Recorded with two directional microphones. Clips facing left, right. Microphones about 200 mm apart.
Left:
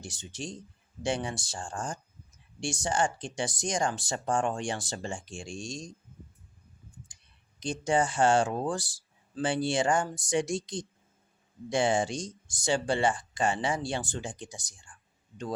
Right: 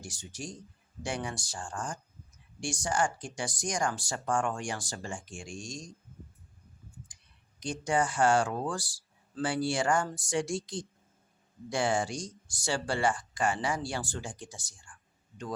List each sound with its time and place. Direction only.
0.0 s speech: 25° left (ahead or behind)
7.6 s speech: 25° left (ahead or behind)